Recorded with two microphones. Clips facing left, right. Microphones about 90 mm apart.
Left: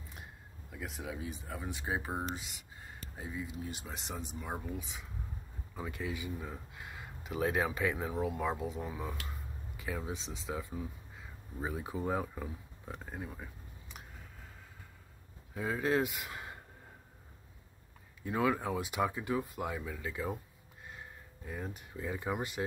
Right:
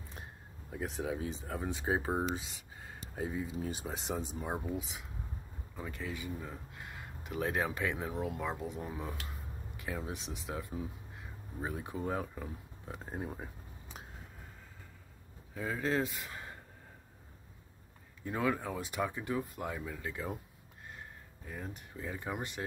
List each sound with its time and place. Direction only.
0.7 s speech: 30° right (ahead or behind)
3.2 s speech: 40° right (ahead or behind)
5.8 s speech: 5° left (ahead or behind)
13.0 s speech: 35° right (ahead or behind)
15.5 s speech: 10° left (ahead or behind)
18.2 s speech: 5° left (ahead or behind)
21.5 s speech: 5° left (ahead or behind)